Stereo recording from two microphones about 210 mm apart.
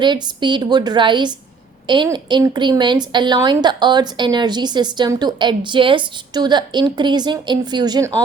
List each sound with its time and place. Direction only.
0.0 s a woman's voice: 20° right (ahead or behind)